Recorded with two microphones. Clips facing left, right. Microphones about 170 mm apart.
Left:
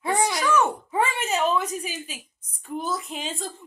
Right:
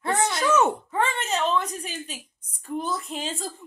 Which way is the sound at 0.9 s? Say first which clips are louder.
Left 1 dB; 10° left (ahead or behind).